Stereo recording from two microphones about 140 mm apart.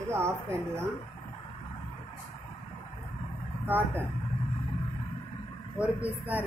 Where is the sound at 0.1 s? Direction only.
20° right (ahead or behind).